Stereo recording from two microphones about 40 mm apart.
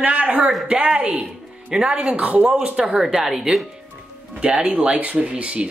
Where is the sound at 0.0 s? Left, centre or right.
Right.